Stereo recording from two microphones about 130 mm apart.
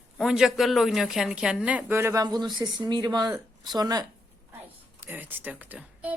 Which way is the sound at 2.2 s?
30° right (ahead or behind).